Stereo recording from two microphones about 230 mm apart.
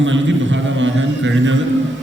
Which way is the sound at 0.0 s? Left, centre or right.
Right.